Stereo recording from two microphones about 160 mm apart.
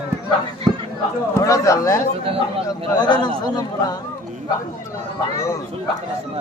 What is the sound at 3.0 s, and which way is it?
Speech, 25° left (ahead or behind).